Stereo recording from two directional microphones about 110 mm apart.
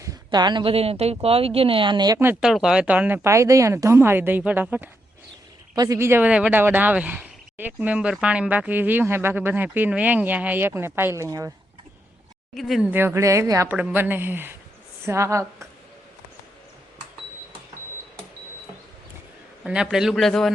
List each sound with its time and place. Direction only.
0.0 s a sound: 35° right (ahead or behind)
0.7 s speech: 65° right (ahead or behind); by 2.1 s 45° right (ahead or behind)
2.4 s speech: 5° right (ahead or behind)
3.2 s speech: 25° right (ahead or behind)
5.7 s speech: 35° right (ahead or behind)
6.0 s speech: 20° right (ahead or behind)
12.5 s a man's voice: centre (ahead or behind)
12.9 s speech: 20° right (ahead or behind)
13.7 s speech: 15° right (ahead or behind)
19.6 s a man's voice: 10° right (ahead or behind)